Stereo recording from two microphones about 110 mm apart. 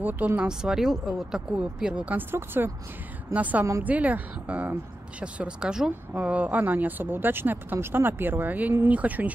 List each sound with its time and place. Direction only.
0.0 s speech: 15° right (ahead or behind)